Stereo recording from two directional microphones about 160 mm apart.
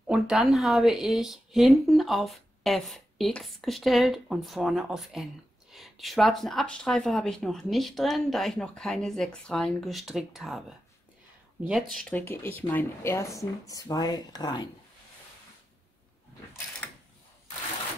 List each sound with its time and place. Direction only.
0.0 s a woman's voice: 5° right (ahead or behind)
11.6 s speech: centre (ahead or behind); by 14.7 s 25° left (ahead or behind)